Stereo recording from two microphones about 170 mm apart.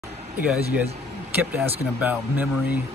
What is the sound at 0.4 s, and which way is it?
Speech, 10° right (ahead or behind).